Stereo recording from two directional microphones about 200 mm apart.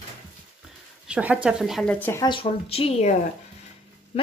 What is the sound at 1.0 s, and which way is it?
Speech, 5° right (ahead or behind).